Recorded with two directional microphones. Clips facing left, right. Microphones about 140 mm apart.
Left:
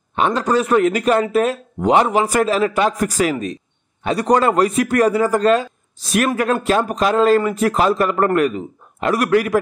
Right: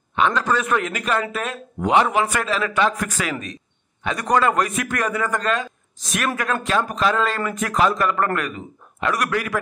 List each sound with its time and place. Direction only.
0.1 s a man's voice: 40° left (ahead or behind)